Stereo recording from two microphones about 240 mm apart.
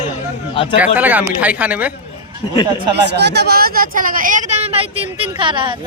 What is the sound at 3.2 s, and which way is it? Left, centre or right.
Speech, right.